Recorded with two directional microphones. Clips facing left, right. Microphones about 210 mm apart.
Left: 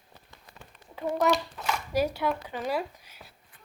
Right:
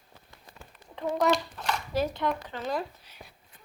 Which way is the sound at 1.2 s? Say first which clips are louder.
Even; 5° left (ahead or behind).